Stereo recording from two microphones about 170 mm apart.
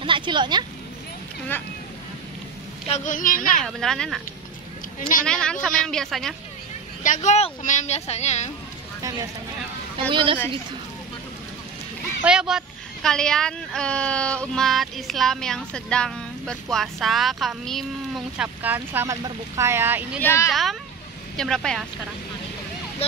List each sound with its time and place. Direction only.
0.0 s speech: 30° right (ahead or behind)
2.9 s speech: 50° left (ahead or behind)
3.6 s speech: 5° left (ahead or behind)
5.2 s speech: 5° left (ahead or behind)
7.0 s speech: 45° left (ahead or behind)
9.9 s speech: 30° right (ahead or behind)
12.2 s speech: 5° right (ahead or behind)
20.2 s speech: 15° left (ahead or behind)
21.4 s speech: 5° left (ahead or behind)